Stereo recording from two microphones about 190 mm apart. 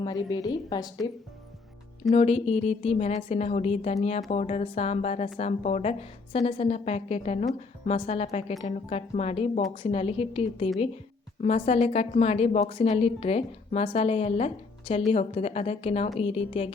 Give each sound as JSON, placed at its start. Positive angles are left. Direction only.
{"t": 0.0, "sound": "a woman's voice", "side_deg": 20}
{"t": 2.1, "sound": "a woman's voice", "side_deg": 35}